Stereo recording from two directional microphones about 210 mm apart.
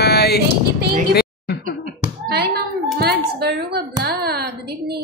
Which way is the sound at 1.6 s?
45° right (ahead or behind).